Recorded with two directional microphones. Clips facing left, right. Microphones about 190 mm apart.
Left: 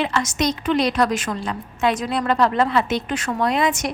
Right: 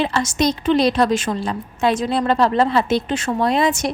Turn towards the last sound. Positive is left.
turn(degrees=-30)  # may be behind; listen again after turning